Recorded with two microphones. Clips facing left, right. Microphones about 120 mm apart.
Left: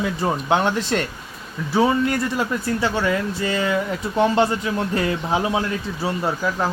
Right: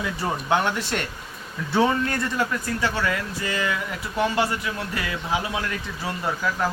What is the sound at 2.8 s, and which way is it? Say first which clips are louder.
Speech: left 4 dB; 25° left (ahead or behind).